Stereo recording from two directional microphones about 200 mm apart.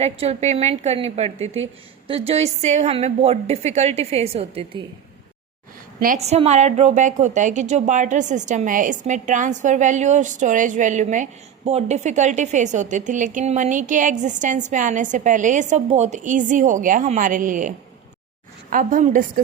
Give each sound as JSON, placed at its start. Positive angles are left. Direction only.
{"t": 0.0, "sound": "a woman's voice", "side_deg": -30}
{"t": 6.0, "sound": "a woman's voice", "side_deg": -35}